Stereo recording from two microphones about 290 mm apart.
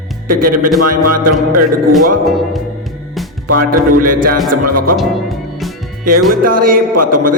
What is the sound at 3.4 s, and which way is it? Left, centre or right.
Speech, right.